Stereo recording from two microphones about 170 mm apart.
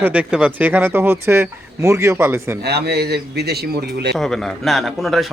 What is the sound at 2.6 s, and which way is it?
A man's voice, 75° right (ahead or behind).